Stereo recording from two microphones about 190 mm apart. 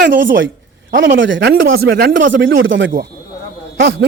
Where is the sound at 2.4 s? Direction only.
80° right.